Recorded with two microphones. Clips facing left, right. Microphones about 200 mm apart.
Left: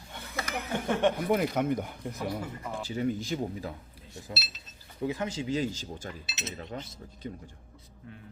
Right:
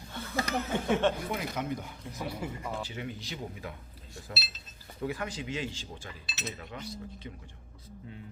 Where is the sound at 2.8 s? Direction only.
40° left (ahead or behind).